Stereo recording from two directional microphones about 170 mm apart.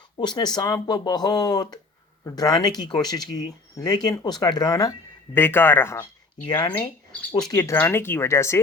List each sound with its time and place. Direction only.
0.2 s speech: 25° left (ahead or behind)
6.5 s speech: 25° left (ahead or behind)
7.5 s speech: 15° left (ahead or behind)